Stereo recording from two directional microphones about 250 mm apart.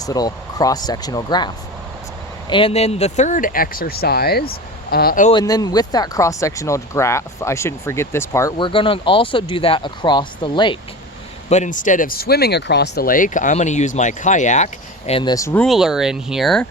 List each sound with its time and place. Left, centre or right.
0.0 s speech: centre; by 5.3 s left
5.3 s speech: centre